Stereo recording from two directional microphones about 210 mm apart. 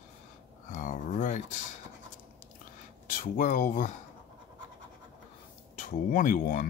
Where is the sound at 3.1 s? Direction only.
40° left (ahead or behind).